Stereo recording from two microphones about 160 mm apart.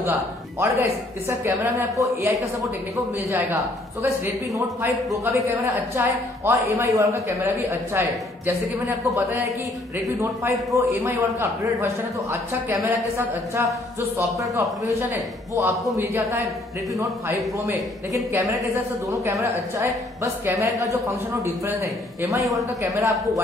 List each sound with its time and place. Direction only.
0.0 s a man's voice: 15° right (ahead or behind)
3.3 s a man's voice: 15° right (ahead or behind)
5.1 s a man's voice: 20° right (ahead or behind)
10.7 s a man's voice: 20° right (ahead or behind)
18.1 s a man's voice: 20° right (ahead or behind)
20.5 s a man's voice: 20° right (ahead or behind)